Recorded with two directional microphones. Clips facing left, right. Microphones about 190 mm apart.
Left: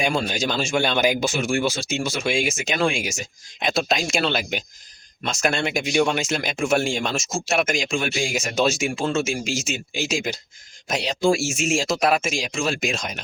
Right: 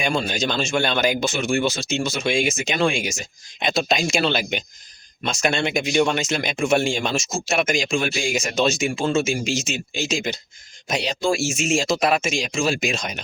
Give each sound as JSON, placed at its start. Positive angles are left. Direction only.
{"t": 0.0, "sound": "speech", "side_deg": 10}